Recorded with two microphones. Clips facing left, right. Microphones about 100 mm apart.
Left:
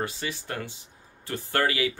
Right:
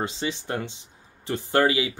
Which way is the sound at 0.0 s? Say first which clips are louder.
Right 3 dB; 20° right (ahead or behind).